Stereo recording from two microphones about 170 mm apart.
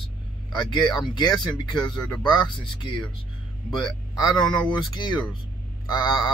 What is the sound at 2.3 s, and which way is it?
Speech, 25° left (ahead or behind).